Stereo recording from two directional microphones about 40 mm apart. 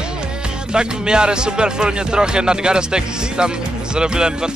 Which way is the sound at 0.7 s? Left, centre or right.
Right.